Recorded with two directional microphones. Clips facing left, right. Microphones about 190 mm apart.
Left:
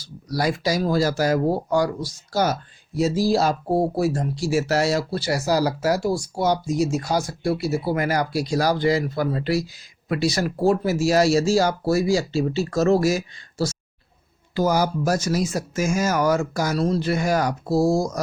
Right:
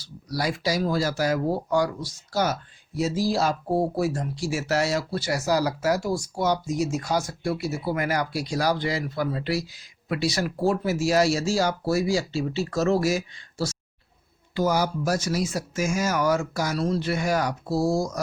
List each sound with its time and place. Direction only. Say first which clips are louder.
0.0 s speech: left 4 dB; 45° left (ahead or behind)